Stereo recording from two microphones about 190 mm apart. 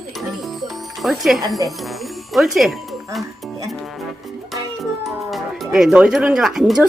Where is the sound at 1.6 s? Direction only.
Centre (ahead or behind).